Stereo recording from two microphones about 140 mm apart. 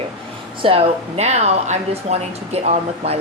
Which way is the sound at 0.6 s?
45° right (ahead or behind).